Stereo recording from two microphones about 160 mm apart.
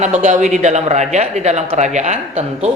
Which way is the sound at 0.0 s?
50° right (ahead or behind).